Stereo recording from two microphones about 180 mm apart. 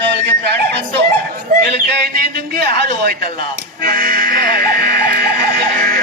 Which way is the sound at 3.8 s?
50° right (ahead or behind).